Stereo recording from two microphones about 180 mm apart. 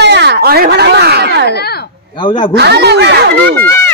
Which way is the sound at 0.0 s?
70° right (ahead or behind).